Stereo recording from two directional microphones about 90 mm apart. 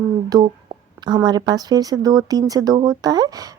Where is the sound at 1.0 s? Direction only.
50° right (ahead or behind).